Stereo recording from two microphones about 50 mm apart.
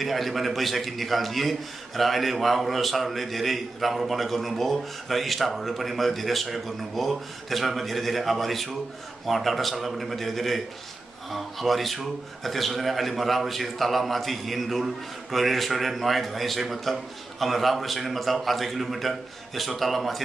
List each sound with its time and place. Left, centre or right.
0.0 s a man's voice: centre